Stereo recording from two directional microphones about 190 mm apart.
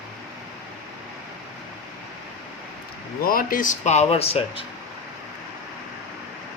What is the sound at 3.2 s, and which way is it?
Speech, 50° left (ahead or behind).